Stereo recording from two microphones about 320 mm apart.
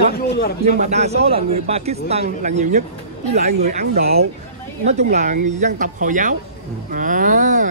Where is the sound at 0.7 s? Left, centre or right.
Right.